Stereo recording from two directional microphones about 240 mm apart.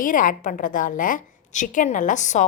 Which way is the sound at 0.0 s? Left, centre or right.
Left.